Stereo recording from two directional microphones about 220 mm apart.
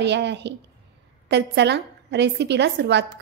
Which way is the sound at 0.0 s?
50° right (ahead or behind).